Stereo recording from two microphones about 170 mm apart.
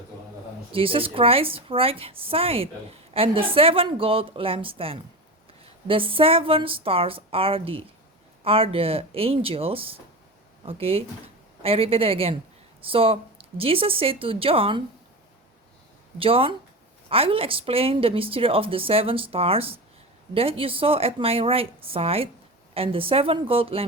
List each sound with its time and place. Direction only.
0.7 s a woman's voice: 30° right (ahead or behind)
16.1 s a woman's voice: 35° right (ahead or behind)